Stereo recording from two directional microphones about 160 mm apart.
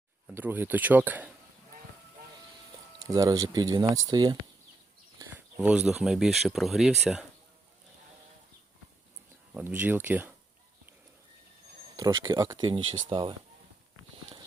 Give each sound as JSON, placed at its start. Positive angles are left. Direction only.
{"t": 0.3, "sound": "speech", "side_deg": -10}
{"t": 3.1, "sound": "speech", "side_deg": -20}
{"t": 5.5, "sound": "speech", "side_deg": -5}
{"t": 9.6, "sound": "speech", "side_deg": -10}
{"t": 11.9, "sound": "speech", "side_deg": -20}